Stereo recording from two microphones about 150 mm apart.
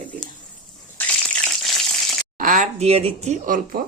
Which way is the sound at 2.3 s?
55° right (ahead or behind).